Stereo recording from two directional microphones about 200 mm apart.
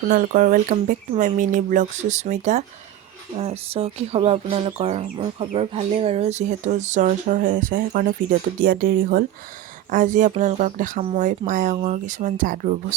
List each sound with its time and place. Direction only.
0.1 s speech: 40° right (ahead or behind)